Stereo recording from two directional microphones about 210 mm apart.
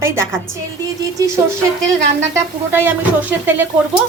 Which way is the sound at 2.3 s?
10° right (ahead or behind).